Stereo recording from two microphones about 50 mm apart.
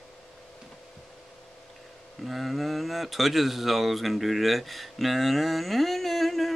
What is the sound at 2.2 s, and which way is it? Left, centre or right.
Speech, centre.